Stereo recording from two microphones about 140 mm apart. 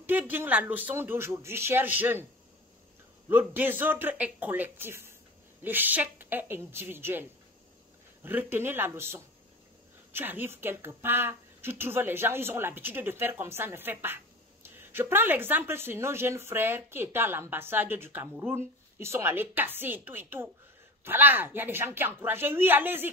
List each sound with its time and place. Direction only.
0.0 s speech: 15° right (ahead or behind)
3.3 s speech: 15° right (ahead or behind)